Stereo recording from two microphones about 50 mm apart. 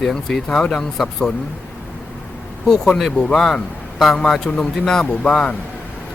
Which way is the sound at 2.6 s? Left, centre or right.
Centre.